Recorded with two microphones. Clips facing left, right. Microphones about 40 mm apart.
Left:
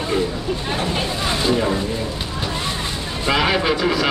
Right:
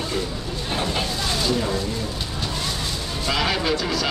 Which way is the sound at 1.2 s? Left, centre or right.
Left.